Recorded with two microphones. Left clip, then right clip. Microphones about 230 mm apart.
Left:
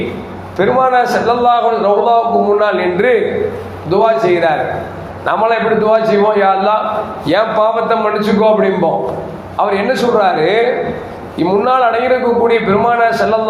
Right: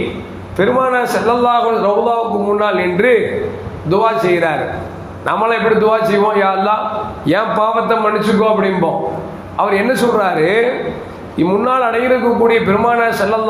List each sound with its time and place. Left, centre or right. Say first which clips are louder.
0.5 s a man's voice: left 2 dB; right